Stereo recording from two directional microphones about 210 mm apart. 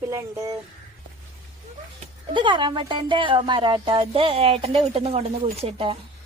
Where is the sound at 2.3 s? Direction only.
20° right (ahead or behind).